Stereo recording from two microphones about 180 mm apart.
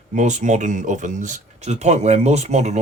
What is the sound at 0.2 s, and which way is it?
Speech, 40° right (ahead or behind).